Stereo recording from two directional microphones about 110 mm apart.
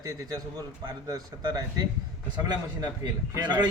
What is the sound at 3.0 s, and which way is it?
Speech, 35° right (ahead or behind).